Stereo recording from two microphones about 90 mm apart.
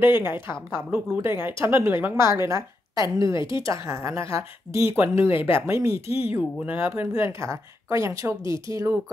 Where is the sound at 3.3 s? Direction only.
65° left (ahead or behind).